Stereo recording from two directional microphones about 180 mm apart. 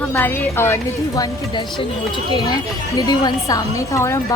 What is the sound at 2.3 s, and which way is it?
A woman's voice, 20° left (ahead or behind).